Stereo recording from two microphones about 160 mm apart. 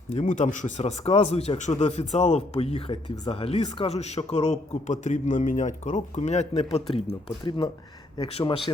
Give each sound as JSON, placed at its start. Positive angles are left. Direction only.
{"t": 0.1, "sound": "a man's voice", "side_deg": 45}